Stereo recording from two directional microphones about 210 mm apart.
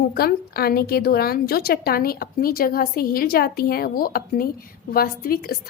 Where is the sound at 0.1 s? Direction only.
45° left (ahead or behind).